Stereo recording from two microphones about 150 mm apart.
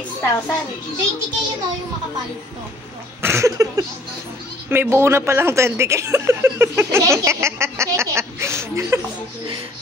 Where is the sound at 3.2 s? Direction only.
20° right (ahead or behind).